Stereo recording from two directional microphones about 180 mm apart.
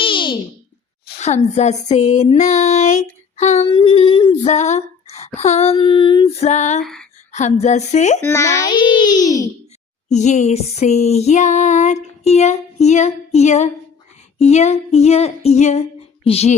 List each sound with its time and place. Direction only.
0.0 s a sound: 25° left (ahead or behind)
1.2 s child singing: 40° left (ahead or behind)
3.7 s a child's voice: 25° left (ahead or behind)
4.4 s speech: 40° left (ahead or behind)
5.4 s child singing: 35° left (ahead or behind)
6.8 s a sound: 5° left (ahead or behind)
7.3 s child singing: 40° left (ahead or behind)
8.2 s a child's voice: 15° left (ahead or behind)
10.1 s child singing: 40° left (ahead or behind)